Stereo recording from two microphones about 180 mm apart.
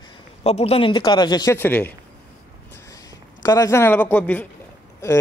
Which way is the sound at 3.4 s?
20° left (ahead or behind).